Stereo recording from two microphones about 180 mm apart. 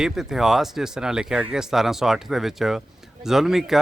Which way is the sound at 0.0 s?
Centre (ahead or behind).